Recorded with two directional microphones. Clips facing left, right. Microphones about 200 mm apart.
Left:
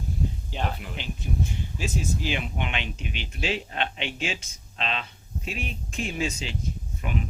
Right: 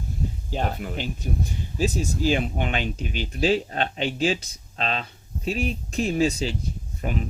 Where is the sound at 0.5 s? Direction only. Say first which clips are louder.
Right 4 dB; 45° right (ahead or behind).